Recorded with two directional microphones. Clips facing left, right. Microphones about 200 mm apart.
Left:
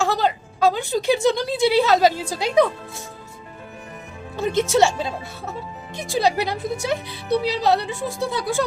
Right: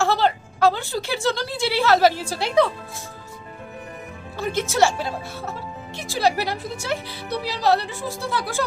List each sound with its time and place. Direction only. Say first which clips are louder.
0.0 s a woman's voice: right 1 dB; 15° left (ahead or behind)
4.4 s a woman's voice: left 3 dB; 20° left (ahead or behind)